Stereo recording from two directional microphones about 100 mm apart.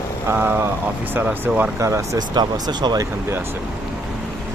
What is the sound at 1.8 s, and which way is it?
Speech, 30° right (ahead or behind).